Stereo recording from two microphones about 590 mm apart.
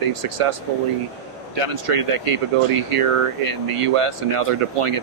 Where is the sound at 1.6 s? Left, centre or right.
Right.